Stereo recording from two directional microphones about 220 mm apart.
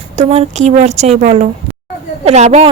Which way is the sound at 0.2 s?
30° right (ahead or behind).